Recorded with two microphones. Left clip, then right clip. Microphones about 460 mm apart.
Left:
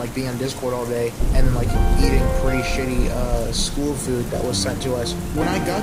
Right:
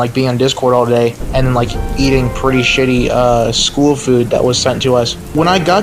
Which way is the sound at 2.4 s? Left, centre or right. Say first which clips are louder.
Right 12 dB; left.